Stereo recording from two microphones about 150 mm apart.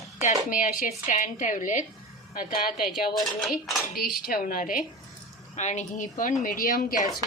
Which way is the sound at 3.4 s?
Centre (ahead or behind).